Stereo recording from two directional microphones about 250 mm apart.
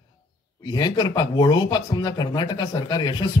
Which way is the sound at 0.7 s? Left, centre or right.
Centre.